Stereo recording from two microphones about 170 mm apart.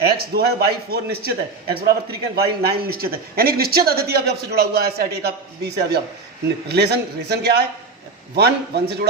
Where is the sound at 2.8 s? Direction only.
65° right (ahead or behind).